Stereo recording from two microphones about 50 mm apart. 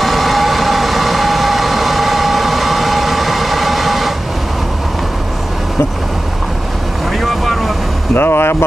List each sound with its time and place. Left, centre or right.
0.0 s vehicle: centre
7.2 s boat: centre
8.2 s speech: left